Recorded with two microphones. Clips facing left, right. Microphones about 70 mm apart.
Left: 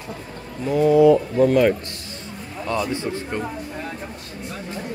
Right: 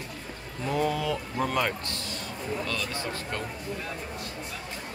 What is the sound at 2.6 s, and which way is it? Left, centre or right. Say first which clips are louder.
Speech: left 8 dB; left.